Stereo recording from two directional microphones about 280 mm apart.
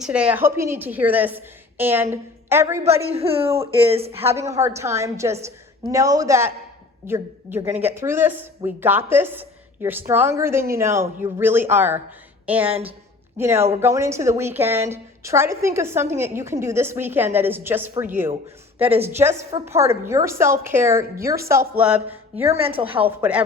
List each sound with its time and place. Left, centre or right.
0.0 s a woman's voice: centre
2.8 s a woman's voice: right
4.2 s a woman's voice: centre
22.6 s a woman's voice: centre
22.9 s a woman's voice: centre